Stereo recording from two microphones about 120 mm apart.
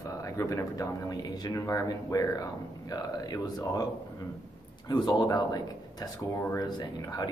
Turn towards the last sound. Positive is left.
turn(degrees=35)  # may be behind; listen again after turning